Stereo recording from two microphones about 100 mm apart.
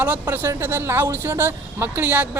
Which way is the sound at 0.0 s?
20° right (ahead or behind).